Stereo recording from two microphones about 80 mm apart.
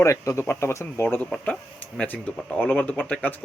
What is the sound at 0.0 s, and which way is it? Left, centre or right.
Speech, left.